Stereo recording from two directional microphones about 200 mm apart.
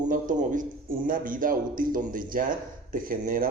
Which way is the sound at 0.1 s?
40° right (ahead or behind).